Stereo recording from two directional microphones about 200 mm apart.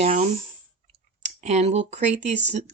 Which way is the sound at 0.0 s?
35° right (ahead or behind).